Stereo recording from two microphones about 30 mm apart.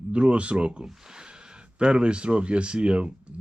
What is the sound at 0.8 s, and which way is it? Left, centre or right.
Speech, right.